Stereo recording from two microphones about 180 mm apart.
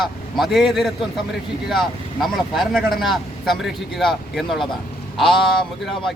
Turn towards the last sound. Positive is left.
turn(degrees=0)  # may be behind; listen again after turning